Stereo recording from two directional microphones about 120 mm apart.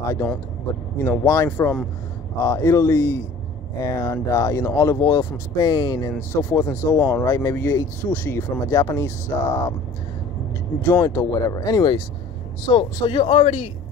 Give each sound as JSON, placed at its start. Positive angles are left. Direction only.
{"t": 0.9, "sound": "speech", "side_deg": 20}
{"t": 6.3, "sound": "speech", "side_deg": 20}
{"t": 10.8, "sound": "speech", "side_deg": 25}